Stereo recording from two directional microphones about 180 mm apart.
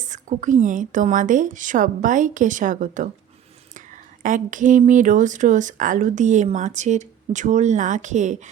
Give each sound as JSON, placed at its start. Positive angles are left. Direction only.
{"t": 0.0, "sound": "speech", "side_deg": -45}